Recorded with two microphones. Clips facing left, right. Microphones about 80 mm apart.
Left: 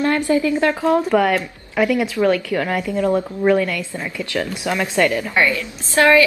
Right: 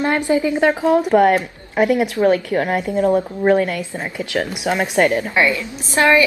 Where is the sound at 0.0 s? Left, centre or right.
Right.